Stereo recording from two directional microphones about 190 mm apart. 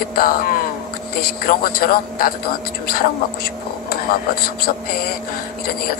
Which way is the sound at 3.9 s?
50° left (ahead or behind).